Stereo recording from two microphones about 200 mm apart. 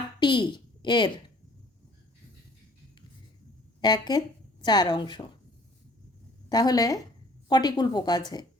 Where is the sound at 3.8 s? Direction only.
20° left (ahead or behind).